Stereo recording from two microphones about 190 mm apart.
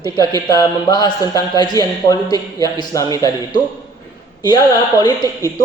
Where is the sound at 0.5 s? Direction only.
20° left (ahead or behind).